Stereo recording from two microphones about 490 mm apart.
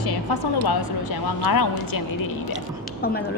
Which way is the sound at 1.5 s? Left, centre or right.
Left.